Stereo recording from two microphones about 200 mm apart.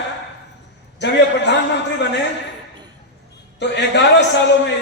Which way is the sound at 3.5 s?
60° left (ahead or behind).